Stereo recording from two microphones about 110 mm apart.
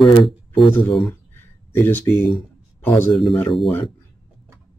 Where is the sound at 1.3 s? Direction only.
20° left (ahead or behind).